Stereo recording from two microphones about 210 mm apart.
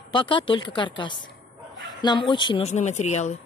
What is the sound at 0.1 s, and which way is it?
A woman's voice, 25° left (ahead or behind).